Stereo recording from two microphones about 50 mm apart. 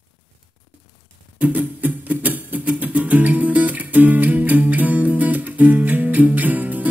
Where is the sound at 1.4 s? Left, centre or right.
Right.